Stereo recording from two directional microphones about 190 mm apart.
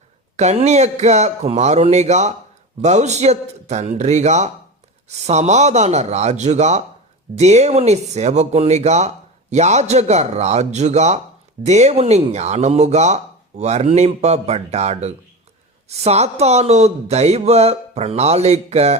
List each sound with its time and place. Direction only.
0.3 s speech: 35° right (ahead or behind)